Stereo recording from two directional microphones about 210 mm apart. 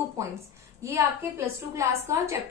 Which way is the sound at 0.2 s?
15° right (ahead or behind).